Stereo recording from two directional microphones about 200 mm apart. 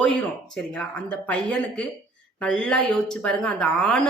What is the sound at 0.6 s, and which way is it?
A woman's voice, 5° left (ahead or behind).